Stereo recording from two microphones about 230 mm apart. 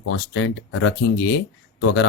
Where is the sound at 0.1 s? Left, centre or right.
Left.